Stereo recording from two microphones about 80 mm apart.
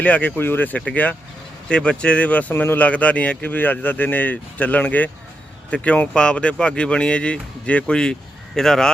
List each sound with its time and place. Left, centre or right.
0.0 s speech: centre